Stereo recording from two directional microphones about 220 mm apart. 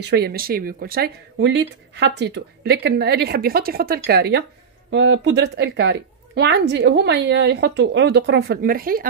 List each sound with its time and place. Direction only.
0.0 s speech: 50° right (ahead or behind)